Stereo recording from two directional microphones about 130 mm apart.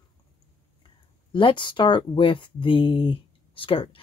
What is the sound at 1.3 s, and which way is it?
Speech, 40° left (ahead or behind).